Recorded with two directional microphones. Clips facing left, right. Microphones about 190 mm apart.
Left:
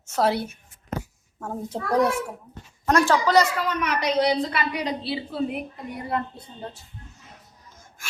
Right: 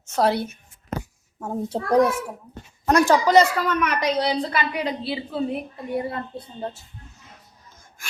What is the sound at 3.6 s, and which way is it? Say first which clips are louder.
Speech: right 3 dB; 55° right (ahead or behind).